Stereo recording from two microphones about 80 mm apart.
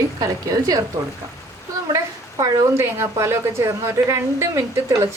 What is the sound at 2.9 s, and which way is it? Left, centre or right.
Speech, right.